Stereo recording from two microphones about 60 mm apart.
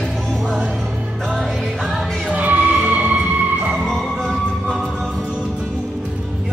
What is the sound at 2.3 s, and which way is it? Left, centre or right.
Music, right.